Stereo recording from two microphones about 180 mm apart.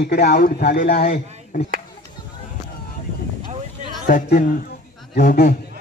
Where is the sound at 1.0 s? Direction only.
40° left (ahead or behind).